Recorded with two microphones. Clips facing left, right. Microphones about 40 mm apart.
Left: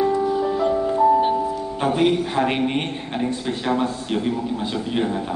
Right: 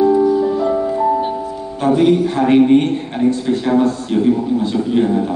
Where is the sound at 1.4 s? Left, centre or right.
Centre.